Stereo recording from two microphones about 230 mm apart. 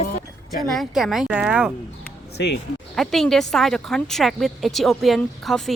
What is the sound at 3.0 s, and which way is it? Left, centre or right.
A woman's voice, centre.